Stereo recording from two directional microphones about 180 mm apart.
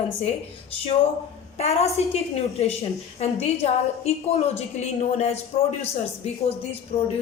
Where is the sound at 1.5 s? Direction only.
35° left (ahead or behind).